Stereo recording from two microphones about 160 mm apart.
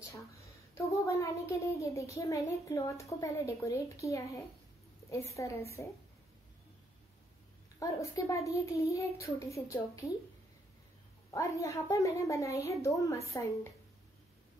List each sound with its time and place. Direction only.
0.7 s a woman's voice: 20° left (ahead or behind)
7.8 s a woman's voice: 20° left (ahead or behind)
11.3 s a woman's voice: 20° left (ahead or behind)